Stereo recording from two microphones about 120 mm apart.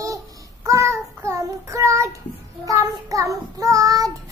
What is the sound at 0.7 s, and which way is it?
Child singing, 25° right (ahead or behind).